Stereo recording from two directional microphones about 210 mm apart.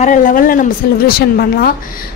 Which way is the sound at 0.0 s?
40° left (ahead or behind).